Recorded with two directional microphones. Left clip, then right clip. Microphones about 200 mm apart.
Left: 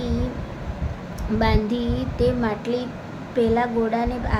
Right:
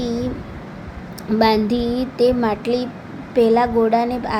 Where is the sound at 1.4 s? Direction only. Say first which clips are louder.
Right 6 dB; 25° right (ahead or behind).